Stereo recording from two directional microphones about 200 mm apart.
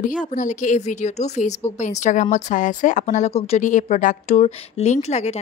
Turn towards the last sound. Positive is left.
turn(degrees=35)  # may be behind; listen again after turning